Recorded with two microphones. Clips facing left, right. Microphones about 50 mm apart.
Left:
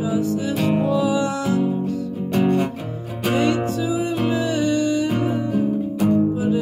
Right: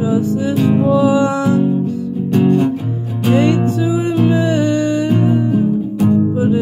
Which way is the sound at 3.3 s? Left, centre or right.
Right.